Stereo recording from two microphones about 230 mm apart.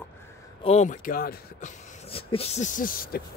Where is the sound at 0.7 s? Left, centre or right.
Left.